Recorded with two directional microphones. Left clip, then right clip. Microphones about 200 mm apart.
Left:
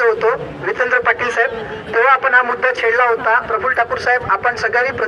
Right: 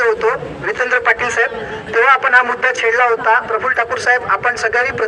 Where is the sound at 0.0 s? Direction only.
25° right (ahead or behind).